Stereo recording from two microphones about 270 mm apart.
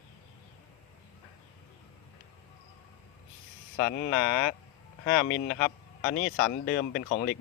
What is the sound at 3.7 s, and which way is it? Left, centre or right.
Speech, left.